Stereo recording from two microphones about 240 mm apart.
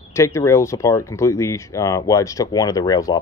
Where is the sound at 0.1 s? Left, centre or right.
Centre.